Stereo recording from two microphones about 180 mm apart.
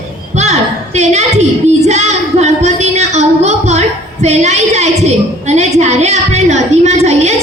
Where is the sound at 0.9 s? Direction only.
40° right (ahead or behind).